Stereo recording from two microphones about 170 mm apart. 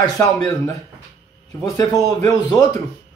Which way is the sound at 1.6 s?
20° left (ahead or behind).